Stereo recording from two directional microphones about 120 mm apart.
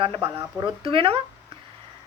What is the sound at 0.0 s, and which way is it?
Speech, 50° right (ahead or behind).